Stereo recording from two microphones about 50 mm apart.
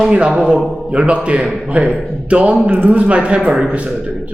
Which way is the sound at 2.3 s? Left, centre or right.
Right.